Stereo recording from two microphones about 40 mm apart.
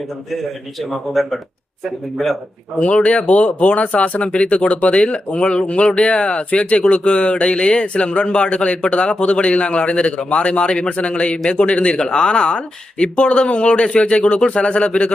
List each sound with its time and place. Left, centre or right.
0.8 s speech: centre
2.8 s speech: left
11.9 s speech: centre